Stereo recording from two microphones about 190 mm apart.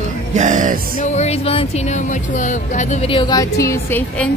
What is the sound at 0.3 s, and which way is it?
Music, 40° right (ahead or behind).